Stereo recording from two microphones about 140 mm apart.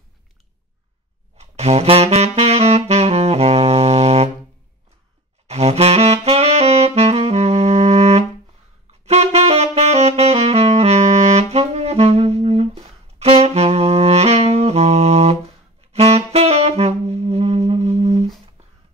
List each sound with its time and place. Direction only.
1.4 s saxophone: 50° right (ahead or behind)
5.5 s saxophone: 50° right (ahead or behind)